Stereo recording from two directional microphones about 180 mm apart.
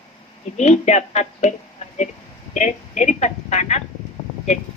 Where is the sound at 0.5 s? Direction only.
40° left (ahead or behind).